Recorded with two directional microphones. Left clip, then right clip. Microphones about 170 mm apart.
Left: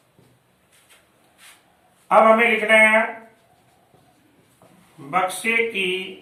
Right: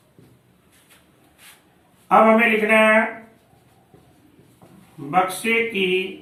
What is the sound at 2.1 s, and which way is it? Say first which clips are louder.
Speech: even; 20° left (ahead or behind).